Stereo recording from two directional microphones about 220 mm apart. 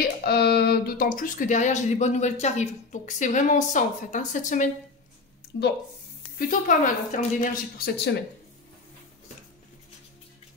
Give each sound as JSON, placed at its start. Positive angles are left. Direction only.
{"t": 0.0, "sound": "speech", "side_deg": 45}
{"t": 5.5, "sound": "speech", "side_deg": 55}
{"t": 6.3, "sound": "speech", "side_deg": 35}
{"t": 7.8, "sound": "speech", "side_deg": 50}